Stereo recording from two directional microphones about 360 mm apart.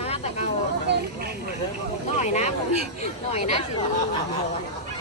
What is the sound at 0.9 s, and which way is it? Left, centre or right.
Speech, right.